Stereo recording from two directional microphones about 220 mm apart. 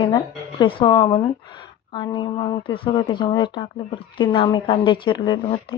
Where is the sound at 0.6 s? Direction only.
25° left (ahead or behind).